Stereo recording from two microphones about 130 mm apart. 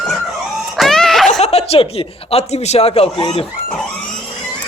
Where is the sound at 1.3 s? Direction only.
55° left (ahead or behind).